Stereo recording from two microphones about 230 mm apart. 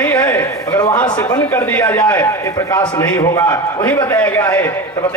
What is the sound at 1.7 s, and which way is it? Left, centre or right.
A man's voice, centre.